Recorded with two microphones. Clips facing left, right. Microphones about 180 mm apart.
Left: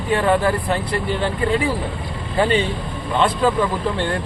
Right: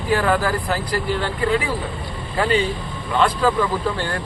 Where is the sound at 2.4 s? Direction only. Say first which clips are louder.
Left 2 dB; 30° left (ahead or behind).